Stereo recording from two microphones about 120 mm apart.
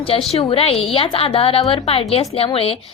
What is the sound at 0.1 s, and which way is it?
A woman's voice, 50° left (ahead or behind).